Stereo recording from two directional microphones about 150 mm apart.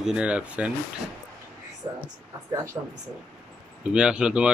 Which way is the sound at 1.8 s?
25° right (ahead or behind).